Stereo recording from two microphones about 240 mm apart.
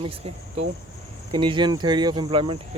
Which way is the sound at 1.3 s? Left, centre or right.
Right.